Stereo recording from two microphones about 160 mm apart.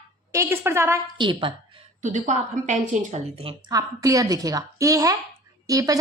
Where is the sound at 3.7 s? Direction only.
20° right (ahead or behind).